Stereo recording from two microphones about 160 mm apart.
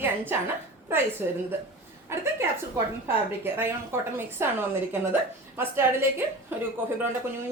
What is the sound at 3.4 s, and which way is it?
Speech, 15° right (ahead or behind).